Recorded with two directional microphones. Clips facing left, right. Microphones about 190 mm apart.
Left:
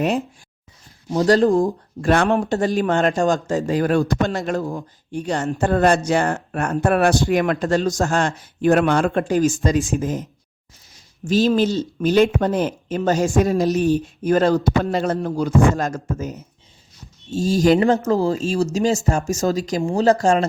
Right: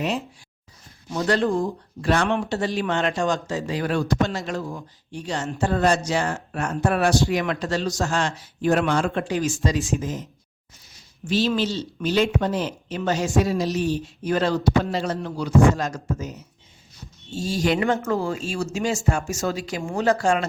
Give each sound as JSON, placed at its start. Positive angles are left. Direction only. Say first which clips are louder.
{"t": 1.1, "sound": "speech", "louder": "left 6 dB", "side_deg": 40}
{"t": 11.3, "sound": "speech", "louder": "left 5 dB", "side_deg": 45}